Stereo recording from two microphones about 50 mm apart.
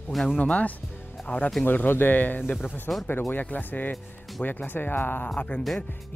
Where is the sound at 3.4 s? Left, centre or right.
Left.